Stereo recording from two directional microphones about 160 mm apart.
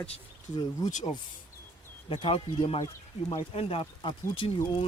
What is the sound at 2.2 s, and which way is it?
Speech, 35° left (ahead or behind).